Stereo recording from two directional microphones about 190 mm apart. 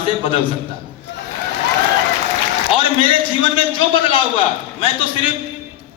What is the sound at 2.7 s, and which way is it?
Speech, 25° left (ahead or behind).